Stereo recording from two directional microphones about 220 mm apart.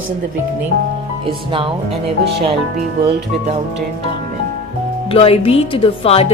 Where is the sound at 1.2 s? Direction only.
25° right (ahead or behind).